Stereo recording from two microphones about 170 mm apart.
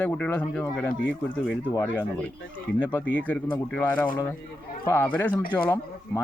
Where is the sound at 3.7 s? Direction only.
10° left (ahead or behind).